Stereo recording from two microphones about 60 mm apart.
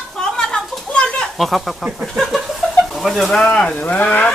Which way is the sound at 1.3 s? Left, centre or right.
Centre.